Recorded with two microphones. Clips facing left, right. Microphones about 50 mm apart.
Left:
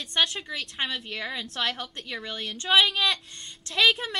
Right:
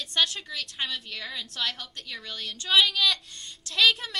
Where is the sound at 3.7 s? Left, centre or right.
Centre.